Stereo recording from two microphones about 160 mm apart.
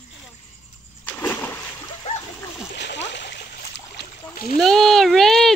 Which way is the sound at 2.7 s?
90° left.